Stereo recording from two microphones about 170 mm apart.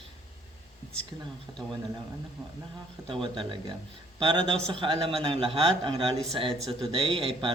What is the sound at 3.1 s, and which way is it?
A man's voice, 30° right (ahead or behind).